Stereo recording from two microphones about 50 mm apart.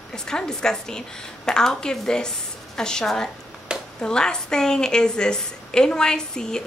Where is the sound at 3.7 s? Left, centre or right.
Centre.